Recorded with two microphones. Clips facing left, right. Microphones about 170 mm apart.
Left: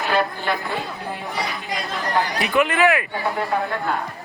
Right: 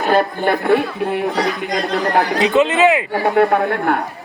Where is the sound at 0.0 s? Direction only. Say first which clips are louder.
Right 6 dB; 45° right (ahead or behind); by 2.2 s 65° right (ahead or behind).